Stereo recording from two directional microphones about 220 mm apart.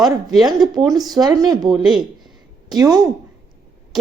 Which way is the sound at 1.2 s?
20° right (ahead or behind).